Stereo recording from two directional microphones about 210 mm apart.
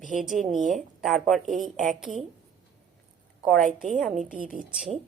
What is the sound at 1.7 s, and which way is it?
Speech, 40° right (ahead or behind).